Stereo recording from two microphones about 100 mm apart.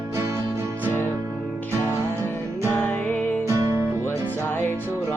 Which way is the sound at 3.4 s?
30° right (ahead or behind).